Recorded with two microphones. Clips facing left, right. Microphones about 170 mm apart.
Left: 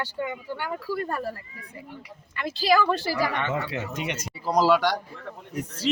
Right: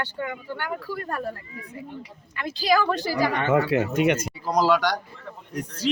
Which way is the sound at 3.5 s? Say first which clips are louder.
Right 9 dB; 60° right (ahead or behind).